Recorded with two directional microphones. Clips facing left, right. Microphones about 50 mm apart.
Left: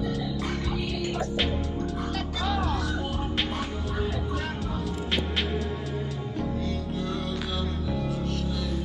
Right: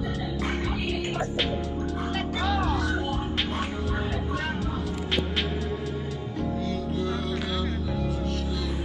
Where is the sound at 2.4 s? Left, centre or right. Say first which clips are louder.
Right 2 dB; centre.